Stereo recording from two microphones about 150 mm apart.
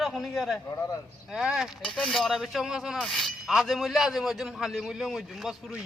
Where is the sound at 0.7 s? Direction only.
20° left (ahead or behind).